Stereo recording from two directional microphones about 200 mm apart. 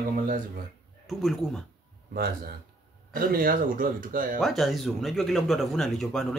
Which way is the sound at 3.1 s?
45° right (ahead or behind).